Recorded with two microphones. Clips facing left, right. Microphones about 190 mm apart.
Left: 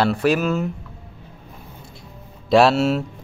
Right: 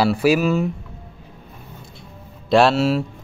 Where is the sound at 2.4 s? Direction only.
Centre (ahead or behind).